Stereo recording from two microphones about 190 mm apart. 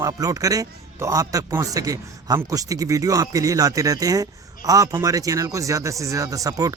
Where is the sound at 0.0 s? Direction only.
20° right (ahead or behind).